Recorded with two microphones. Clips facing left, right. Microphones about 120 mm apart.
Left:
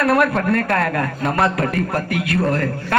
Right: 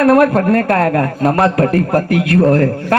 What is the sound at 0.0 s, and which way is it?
A man's voice, 40° right (ahead or behind).